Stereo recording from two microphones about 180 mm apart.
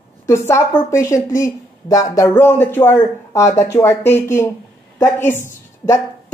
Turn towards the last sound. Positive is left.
turn(degrees=15)  # may be behind; listen again after turning